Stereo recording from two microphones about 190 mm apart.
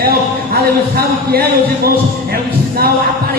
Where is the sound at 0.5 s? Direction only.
55° right (ahead or behind).